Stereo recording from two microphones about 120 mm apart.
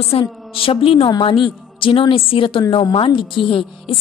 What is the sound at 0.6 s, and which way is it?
A woman's voice, 50° left (ahead or behind).